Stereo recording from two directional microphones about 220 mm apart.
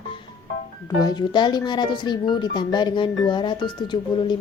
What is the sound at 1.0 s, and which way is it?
A woman's voice, 20° left (ahead or behind).